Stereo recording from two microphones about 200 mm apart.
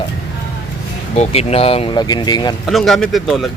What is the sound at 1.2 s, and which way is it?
Speech, 30° left (ahead or behind).